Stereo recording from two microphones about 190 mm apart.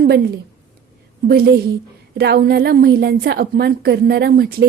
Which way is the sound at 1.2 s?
55° right (ahead or behind).